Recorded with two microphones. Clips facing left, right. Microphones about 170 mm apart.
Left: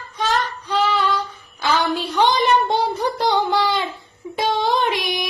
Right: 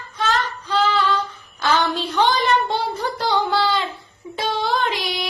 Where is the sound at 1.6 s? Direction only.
10° left (ahead or behind).